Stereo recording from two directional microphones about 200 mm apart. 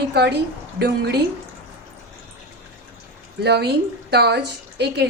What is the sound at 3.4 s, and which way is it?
A woman's voice, 55° right (ahead or behind).